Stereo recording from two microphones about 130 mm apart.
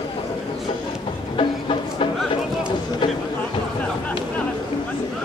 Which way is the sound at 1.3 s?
45° left (ahead or behind).